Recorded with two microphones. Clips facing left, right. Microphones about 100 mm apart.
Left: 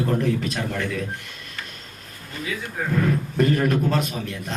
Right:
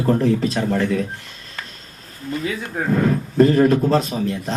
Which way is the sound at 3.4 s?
30° right (ahead or behind).